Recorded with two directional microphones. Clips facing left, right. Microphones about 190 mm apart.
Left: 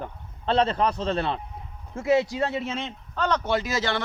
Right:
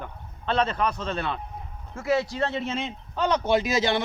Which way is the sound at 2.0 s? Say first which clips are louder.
Left 2 dB; 20° left (ahead or behind).